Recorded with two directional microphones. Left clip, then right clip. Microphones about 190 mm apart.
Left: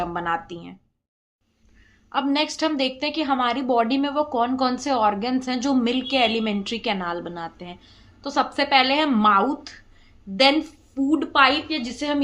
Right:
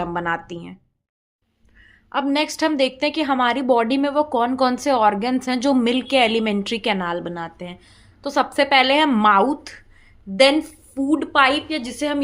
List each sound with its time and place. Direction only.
0.0 s a woman's voice: 30° right (ahead or behind)
2.0 s a woman's voice: 35° right (ahead or behind)